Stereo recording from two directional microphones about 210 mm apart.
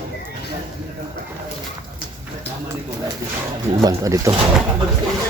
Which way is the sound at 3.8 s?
15° right (ahead or behind).